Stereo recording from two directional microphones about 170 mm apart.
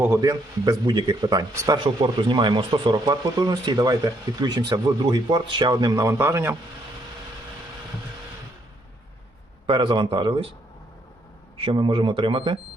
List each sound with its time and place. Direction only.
0.0 s speech: 20° right (ahead or behind)
9.6 s speech: 30° right (ahead or behind)
11.5 s speech: 30° right (ahead or behind)